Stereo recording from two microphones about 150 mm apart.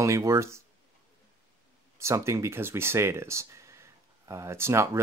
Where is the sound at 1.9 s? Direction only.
20° right (ahead or behind).